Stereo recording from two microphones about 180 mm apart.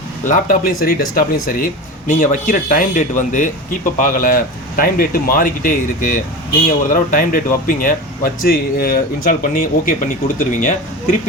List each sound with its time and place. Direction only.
0.3 s speech: 45° left (ahead or behind)